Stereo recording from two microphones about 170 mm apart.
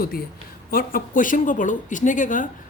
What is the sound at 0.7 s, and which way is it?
Speech, 55° left (ahead or behind).